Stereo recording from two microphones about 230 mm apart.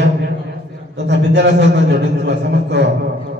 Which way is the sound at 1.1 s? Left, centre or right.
Right.